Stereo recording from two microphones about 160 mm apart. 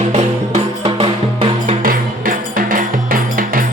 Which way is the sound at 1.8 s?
60° right (ahead or behind).